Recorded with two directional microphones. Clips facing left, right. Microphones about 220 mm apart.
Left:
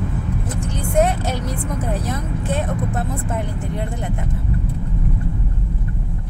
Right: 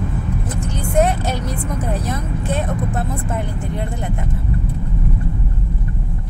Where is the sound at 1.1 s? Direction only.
10° left (ahead or behind).